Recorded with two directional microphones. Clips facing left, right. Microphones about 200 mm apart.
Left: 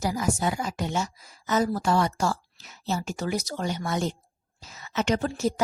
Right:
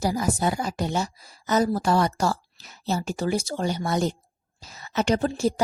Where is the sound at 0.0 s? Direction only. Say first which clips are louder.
Right 2 dB; 35° right (ahead or behind).